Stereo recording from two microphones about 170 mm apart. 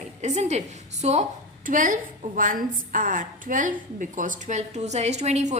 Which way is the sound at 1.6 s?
50° right (ahead or behind).